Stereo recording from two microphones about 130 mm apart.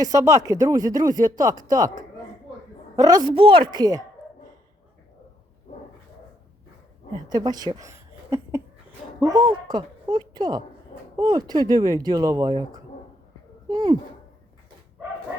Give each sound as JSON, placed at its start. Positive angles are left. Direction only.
{"t": 0.0, "sound": "speech", "side_deg": -25}
{"t": 2.9, "sound": "speech", "side_deg": -30}
{"t": 7.3, "sound": "a woman's voice", "side_deg": -30}